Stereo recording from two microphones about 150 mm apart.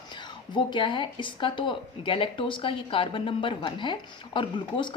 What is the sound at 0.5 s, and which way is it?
Speech, 30° left (ahead or behind).